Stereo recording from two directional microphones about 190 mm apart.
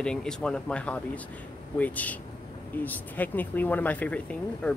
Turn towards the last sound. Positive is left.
turn(degrees=5)  # may be behind; listen again after turning